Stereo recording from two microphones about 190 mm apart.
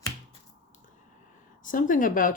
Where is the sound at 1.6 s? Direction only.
45° left (ahead or behind).